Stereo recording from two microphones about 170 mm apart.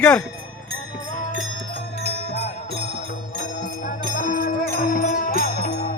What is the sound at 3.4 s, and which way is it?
Music, 50° left (ahead or behind).